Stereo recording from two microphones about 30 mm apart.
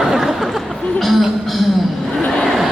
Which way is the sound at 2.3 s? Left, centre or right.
Centre.